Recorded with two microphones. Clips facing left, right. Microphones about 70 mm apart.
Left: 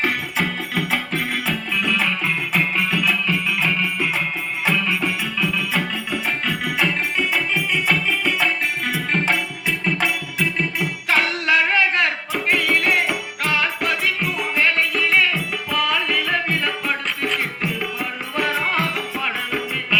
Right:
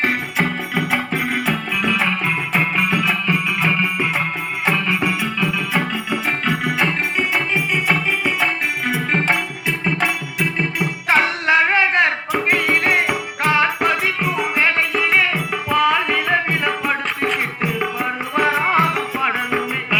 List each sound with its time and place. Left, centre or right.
0.0 s music: right
8.9 s music: right